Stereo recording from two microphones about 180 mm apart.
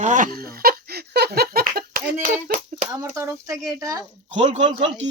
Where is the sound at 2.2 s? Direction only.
50° right (ahead or behind).